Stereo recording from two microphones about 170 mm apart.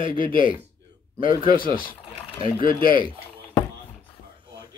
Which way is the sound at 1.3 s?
30° right (ahead or behind).